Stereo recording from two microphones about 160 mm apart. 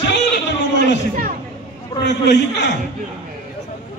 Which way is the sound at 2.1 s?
90° left.